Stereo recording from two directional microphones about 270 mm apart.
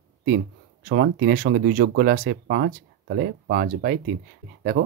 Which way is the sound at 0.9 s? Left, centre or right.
Right.